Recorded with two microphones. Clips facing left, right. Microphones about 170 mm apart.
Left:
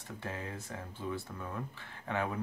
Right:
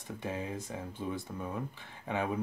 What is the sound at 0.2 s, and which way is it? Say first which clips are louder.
Speech: right 4 dB; 15° right (ahead or behind).